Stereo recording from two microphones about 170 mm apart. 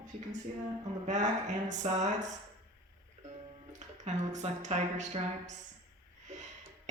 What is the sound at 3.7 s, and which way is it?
A woman's voice, 45° right (ahead or behind).